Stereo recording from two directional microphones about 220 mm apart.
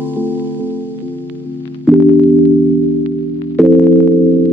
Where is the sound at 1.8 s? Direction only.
Centre (ahead or behind).